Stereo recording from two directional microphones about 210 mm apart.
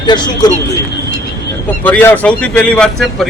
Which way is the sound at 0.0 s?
20° left (ahead or behind).